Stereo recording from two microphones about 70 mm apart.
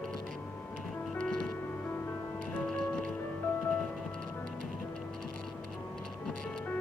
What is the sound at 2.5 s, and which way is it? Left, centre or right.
Music, centre.